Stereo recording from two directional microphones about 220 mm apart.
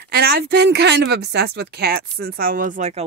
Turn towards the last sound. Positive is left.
turn(degrees=-30)  # may be behind; listen again after turning